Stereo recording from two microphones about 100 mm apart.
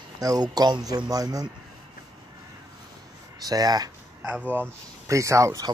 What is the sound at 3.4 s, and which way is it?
Speech, 40° right (ahead or behind).